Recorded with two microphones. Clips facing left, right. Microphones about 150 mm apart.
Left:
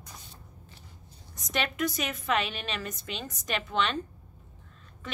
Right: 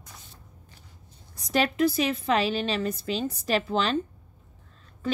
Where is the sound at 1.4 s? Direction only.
35° right (ahead or behind).